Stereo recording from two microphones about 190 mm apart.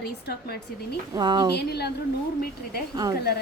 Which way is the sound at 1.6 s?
60° left (ahead or behind).